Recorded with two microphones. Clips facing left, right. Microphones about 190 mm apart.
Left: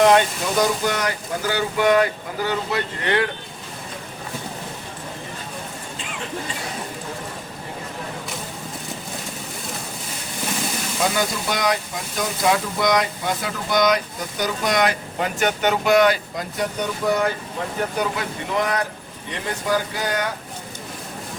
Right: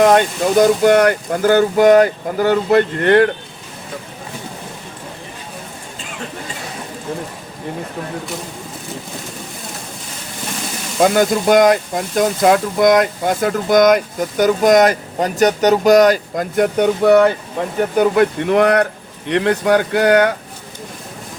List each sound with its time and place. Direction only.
0.6 s speech: 55° right (ahead or behind)
11.0 s speech: 55° right (ahead or behind); by 17.2 s 70° right (ahead or behind)
17.9 s speech: 55° right (ahead or behind)